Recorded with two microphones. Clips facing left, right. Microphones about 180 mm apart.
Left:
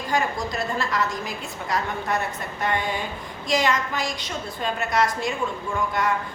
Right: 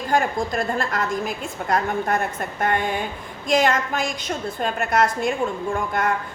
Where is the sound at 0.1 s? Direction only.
50° right (ahead or behind).